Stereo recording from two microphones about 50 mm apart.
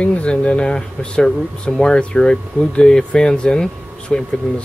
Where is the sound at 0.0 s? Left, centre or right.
Left.